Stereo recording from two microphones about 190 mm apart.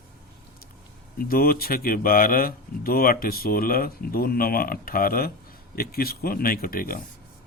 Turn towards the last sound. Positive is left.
turn(degrees=50)  # may be behind; listen again after turning